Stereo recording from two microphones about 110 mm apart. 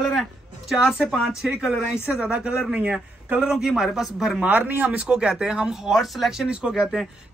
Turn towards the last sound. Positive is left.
turn(degrees=-5)  # may be behind; listen again after turning